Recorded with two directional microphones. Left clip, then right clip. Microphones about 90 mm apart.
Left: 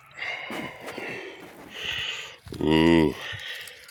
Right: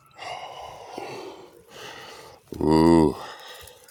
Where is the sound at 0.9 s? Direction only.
40° right (ahead or behind).